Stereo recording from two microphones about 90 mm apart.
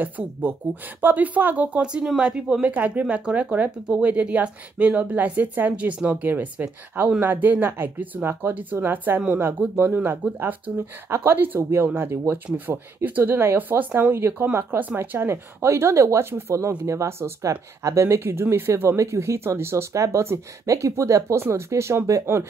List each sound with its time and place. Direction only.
0.0 s speech: 20° right (ahead or behind)